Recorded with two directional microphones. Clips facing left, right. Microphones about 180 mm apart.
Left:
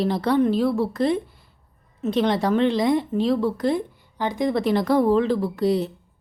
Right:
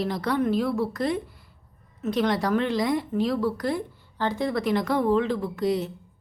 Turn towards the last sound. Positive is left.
turn(degrees=35)  # may be behind; listen again after turning